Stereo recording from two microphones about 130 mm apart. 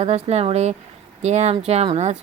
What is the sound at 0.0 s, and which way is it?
Speech, 55° right (ahead or behind).